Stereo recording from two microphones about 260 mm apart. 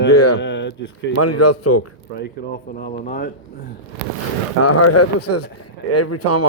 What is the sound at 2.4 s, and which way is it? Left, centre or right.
Speech, left.